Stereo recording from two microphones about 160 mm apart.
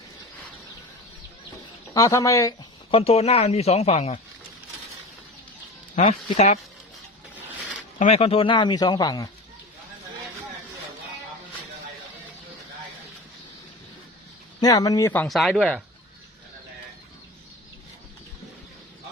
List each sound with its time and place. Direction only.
1.9 s speech: 20° left (ahead or behind)
2.9 s speech: 40° left (ahead or behind)
6.3 s speech: 45° left (ahead or behind)
7.9 s speech: 45° left (ahead or behind); by 9.3 s 25° left (ahead or behind)
14.6 s speech: 25° left (ahead or behind)
15.1 s speech: 10° left (ahead or behind)
15.4 s speech: centre (ahead or behind)